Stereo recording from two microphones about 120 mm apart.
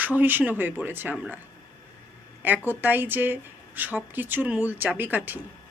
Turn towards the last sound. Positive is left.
turn(degrees=-15)  # may be behind; listen again after turning